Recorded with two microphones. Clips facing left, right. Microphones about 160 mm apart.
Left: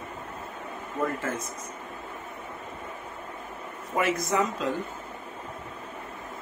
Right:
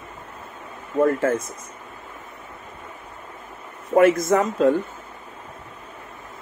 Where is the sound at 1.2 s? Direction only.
50° right (ahead or behind).